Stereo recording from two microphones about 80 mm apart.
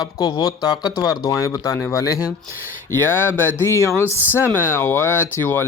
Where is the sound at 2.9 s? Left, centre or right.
Left.